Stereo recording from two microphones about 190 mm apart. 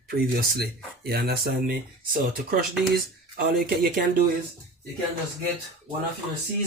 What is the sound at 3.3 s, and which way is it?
Speech, 50° right (ahead or behind).